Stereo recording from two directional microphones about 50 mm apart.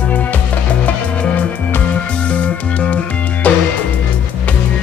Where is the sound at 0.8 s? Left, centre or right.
Left.